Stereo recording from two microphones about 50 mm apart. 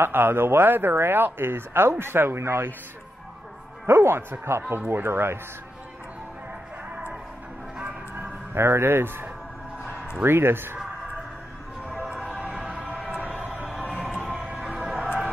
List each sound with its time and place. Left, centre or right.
0.0 s speech: right
3.8 s speech: right
8.5 s speech: right
12.1 s music: centre
12.8 s a sound: right
14.1 s a sound: centre
14.7 s music: centre